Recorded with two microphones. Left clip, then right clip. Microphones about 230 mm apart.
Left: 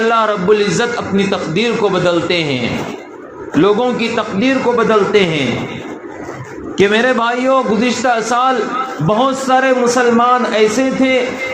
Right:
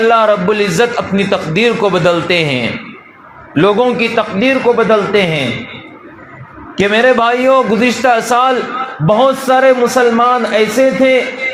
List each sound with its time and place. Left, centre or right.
0.1 s a man's voice: right
6.7 s a man's voice: right